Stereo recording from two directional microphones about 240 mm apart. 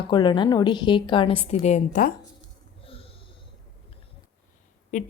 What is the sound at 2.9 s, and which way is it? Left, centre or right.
Snort, left.